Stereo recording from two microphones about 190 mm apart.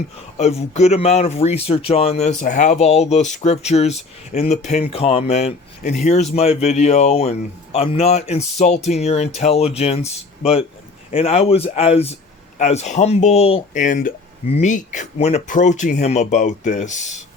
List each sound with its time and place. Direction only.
0.3 s speech: 35° left (ahead or behind)